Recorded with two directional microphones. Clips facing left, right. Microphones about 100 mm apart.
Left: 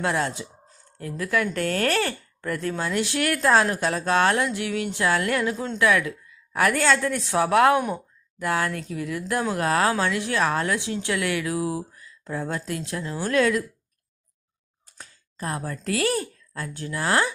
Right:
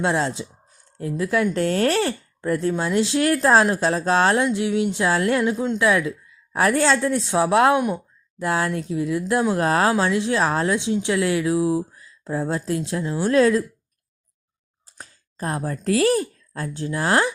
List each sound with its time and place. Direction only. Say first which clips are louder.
0.0 s speech: right 3 dB; 25° right (ahead or behind)
14.9 s a sound: right 3 dB; 35° right (ahead or behind)
15.7 s speech: right 7 dB; 30° right (ahead or behind)